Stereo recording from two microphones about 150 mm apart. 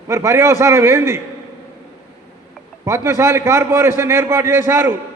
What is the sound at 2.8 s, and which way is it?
A man's voice, 20° right (ahead or behind).